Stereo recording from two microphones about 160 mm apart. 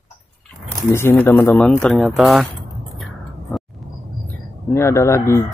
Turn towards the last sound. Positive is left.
turn(degrees=15)  # may be behind; listen again after turning